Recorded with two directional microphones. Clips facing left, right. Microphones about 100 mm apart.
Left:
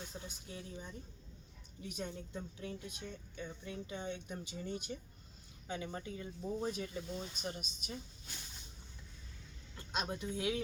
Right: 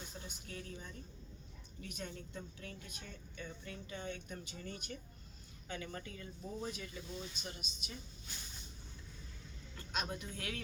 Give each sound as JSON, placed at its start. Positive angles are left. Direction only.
{"t": 0.4, "sound": "a woman's voice", "side_deg": 20}
{"t": 6.6, "sound": "speech", "side_deg": 35}
{"t": 9.7, "sound": "a sound", "side_deg": 20}
{"t": 10.2, "sound": "a woman's voice", "side_deg": 20}